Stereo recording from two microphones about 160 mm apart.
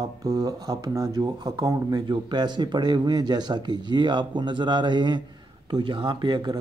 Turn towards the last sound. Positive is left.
turn(degrees=-30)  # may be behind; listen again after turning